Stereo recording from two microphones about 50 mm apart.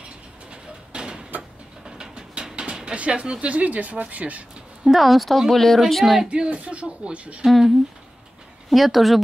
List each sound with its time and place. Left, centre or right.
0.5 s bird: centre
1.9 s pigeon: centre
4.8 s speech: centre
6.3 s speech: right
7.4 s speech: centre